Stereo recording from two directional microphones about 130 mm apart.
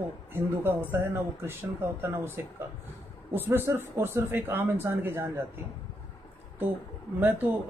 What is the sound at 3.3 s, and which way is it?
Speech, 15° right (ahead or behind).